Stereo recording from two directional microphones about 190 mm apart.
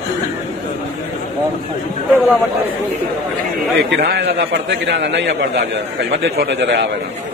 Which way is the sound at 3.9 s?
65° right (ahead or behind).